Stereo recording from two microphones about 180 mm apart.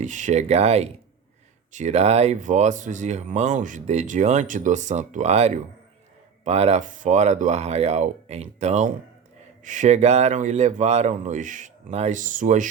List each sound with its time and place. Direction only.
0.0 s speech: 40° right (ahead or behind)